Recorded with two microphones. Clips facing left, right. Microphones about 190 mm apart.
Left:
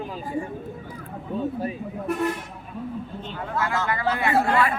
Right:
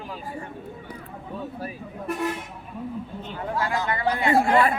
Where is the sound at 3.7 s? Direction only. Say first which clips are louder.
Even; 15° right (ahead or behind).